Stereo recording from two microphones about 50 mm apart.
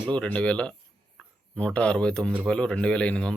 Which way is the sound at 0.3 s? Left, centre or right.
Left.